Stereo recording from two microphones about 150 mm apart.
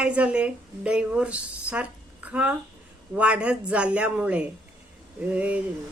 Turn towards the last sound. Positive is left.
turn(degrees=-10)  # may be behind; listen again after turning